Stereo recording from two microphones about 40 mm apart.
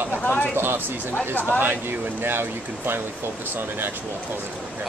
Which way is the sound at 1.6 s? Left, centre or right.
Right.